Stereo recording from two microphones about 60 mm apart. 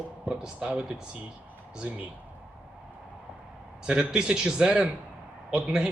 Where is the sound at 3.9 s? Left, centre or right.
Centre.